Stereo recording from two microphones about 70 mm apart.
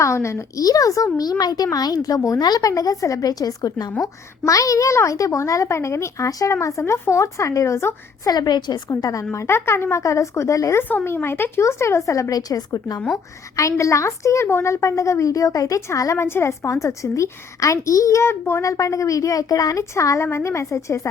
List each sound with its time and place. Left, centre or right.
0.0 s a woman's voice: left
0.6 s speech: left
2.4 s speech: left
4.0 s a woman's voice: left
8.2 s a woman's voice: left
8.9 s speech: left
9.3 s a woman's voice: left
10.8 s a woman's voice: left
13.6 s a woman's voice: left